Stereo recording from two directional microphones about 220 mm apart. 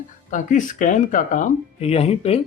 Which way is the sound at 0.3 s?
35° left (ahead or behind).